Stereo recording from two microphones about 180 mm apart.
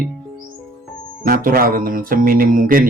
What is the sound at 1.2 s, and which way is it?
Speech, 50° right (ahead or behind).